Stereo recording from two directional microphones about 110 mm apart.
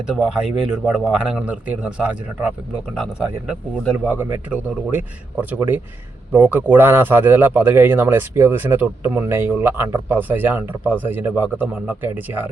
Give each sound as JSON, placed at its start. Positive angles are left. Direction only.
{"t": 0.2, "sound": "a man's voice", "side_deg": -5}